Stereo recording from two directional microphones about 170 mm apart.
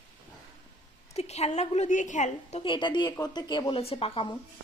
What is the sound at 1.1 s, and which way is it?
A woman's voice, 40° left (ahead or behind).